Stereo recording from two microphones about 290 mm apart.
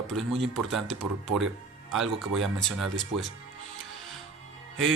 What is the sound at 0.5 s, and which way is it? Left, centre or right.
Speech, centre.